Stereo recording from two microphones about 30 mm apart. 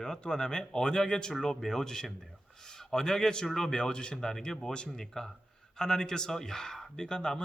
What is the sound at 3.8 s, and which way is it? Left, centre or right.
Speech, left.